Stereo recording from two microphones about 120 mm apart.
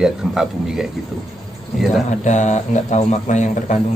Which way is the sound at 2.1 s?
85° left.